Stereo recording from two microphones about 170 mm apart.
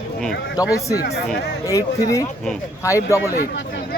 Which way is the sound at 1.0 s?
70° left (ahead or behind).